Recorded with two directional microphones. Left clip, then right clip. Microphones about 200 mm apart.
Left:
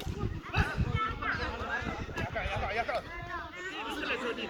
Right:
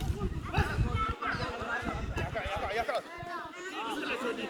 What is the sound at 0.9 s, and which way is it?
Music, 40° right (ahead or behind).